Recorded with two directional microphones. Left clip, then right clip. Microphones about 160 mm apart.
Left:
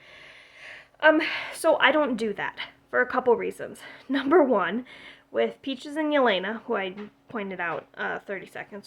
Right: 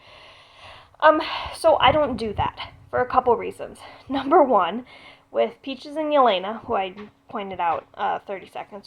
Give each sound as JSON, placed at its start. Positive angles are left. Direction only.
{"t": 1.2, "sound": "a woman's voice", "side_deg": 50}
{"t": 1.6, "sound": "a woman's voice", "side_deg": 15}